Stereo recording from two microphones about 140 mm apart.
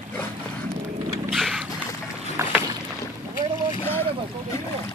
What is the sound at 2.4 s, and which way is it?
Boat, 20° right (ahead or behind).